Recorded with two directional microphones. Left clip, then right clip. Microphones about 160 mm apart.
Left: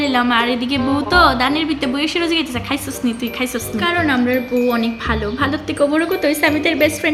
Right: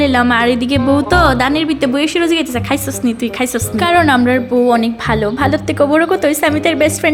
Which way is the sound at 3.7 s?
45° right (ahead or behind).